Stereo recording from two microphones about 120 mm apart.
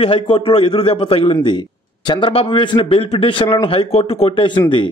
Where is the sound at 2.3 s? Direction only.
50° left (ahead or behind).